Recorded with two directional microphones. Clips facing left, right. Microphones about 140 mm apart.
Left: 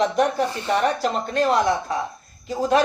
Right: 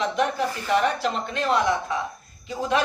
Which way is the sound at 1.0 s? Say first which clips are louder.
Left 5 dB; 40° left (ahead or behind).